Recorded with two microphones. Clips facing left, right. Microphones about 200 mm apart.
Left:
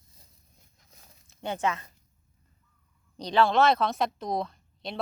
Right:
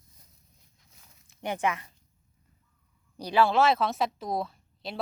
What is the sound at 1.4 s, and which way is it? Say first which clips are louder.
Speech: even; 15° right (ahead or behind).